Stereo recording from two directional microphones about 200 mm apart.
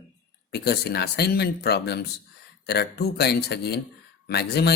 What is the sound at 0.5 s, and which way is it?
Speech, 55° left (ahead or behind).